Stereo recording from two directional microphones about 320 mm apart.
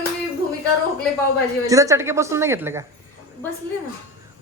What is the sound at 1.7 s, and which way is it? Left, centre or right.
A woman's voice, centre.